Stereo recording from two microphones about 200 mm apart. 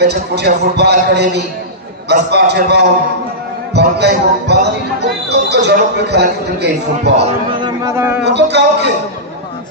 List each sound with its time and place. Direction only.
0.0 s a man's voice: 55° right (ahead or behind)
7.6 s speech: 15° right (ahead or behind)
8.2 s a man's voice: 60° right (ahead or behind)